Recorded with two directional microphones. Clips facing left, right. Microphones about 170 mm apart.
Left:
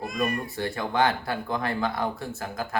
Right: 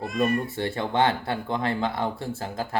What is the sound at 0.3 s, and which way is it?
Speech, 25° right (ahead or behind).